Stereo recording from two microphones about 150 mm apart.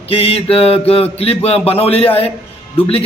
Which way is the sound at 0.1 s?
40° left (ahead or behind).